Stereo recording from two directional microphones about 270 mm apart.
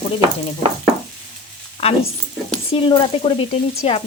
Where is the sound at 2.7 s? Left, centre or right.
Centre.